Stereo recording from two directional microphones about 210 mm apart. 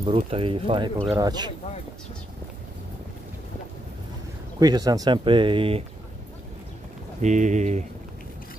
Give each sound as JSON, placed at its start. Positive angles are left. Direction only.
{"t": 0.0, "sound": "speech", "side_deg": -25}
{"t": 4.6, "sound": "speech", "side_deg": -20}
{"t": 7.2, "sound": "speech", "side_deg": -35}